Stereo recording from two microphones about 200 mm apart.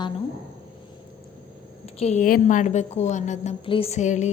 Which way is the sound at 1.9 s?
35° left (ahead or behind).